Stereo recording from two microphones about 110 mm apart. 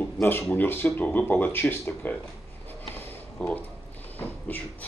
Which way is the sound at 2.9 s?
10° left (ahead or behind).